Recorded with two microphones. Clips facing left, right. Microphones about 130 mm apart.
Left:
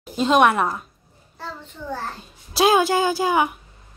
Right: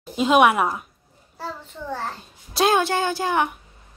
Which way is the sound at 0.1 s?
5° right (ahead or behind).